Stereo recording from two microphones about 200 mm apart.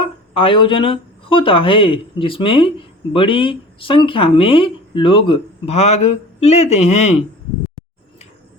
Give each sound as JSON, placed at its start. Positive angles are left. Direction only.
{"t": 0.0, "sound": "speech", "side_deg": 25}